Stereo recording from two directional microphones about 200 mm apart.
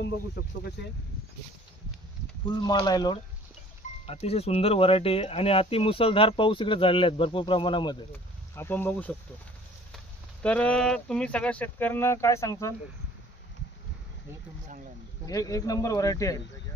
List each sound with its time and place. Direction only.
0.8 s speech: 55° left (ahead or behind)
2.6 s speech: 20° left (ahead or behind)
8.5 s speech: 10° left (ahead or behind)
15.2 s speech: 15° left (ahead or behind)